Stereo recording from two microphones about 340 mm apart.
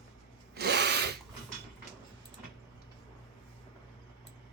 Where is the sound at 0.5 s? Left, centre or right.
Right.